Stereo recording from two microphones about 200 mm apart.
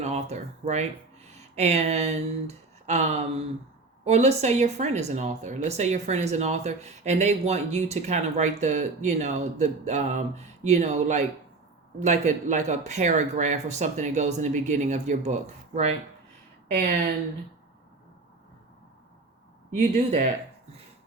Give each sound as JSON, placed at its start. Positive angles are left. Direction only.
{"t": 0.0, "sound": "speech", "side_deg": -35}
{"t": 19.7, "sound": "speech", "side_deg": -35}